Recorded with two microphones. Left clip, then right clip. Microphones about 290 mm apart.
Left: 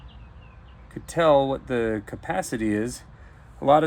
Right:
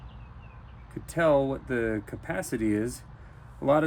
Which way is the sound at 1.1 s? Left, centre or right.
Left.